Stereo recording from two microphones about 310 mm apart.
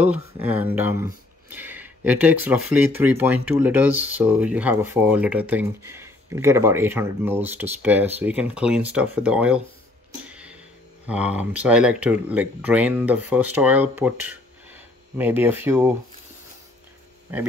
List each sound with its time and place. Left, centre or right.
0.0 s speech: centre
10.2 s a sound: centre
11.1 s speech: centre
17.3 s speech: centre